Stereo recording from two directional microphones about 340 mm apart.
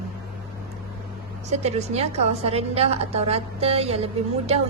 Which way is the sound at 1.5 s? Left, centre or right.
Centre.